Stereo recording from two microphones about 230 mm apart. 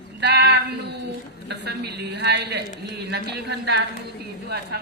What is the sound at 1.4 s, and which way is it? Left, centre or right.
A man's voice, right.